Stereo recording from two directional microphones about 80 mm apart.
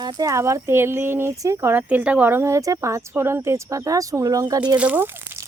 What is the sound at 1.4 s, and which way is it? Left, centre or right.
Speech, right.